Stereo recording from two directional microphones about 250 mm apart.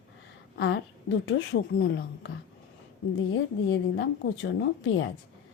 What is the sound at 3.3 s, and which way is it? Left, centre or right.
A woman's voice, left.